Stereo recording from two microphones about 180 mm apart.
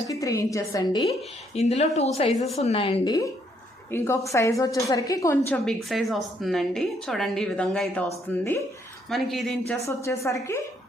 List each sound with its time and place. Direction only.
0.1 s a woman's voice: 20° left (ahead or behind)
1.5 s a woman's voice: 35° left (ahead or behind); by 5.7 s 10° left (ahead or behind)
5.9 s a woman's voice: centre (ahead or behind)
9.8 s a woman's voice: 15° left (ahead or behind)